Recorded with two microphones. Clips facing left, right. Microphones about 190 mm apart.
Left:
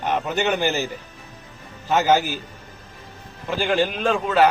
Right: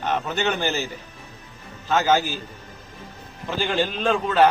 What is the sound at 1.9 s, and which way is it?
Speech, 15° left (ahead or behind).